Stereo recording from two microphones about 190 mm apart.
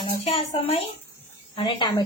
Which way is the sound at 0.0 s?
30° left (ahead or behind).